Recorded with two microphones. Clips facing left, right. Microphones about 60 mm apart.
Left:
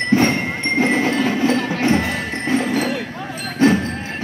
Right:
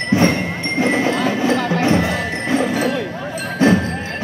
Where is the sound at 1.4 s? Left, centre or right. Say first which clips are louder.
Right 1 dB; centre.